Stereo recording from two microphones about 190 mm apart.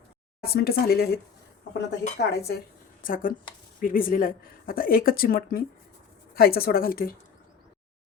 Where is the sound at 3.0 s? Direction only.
45° left (ahead or behind).